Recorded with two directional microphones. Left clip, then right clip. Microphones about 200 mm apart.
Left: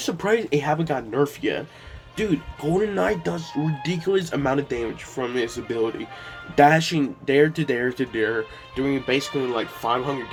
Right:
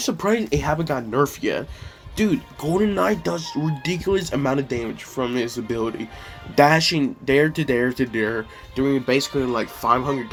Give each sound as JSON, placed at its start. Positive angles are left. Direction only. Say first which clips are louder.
{"t": 0.0, "sound": "speech", "louder": "even", "side_deg": -35}